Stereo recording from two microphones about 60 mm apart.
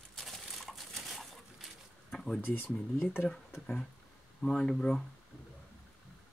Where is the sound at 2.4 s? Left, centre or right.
Left.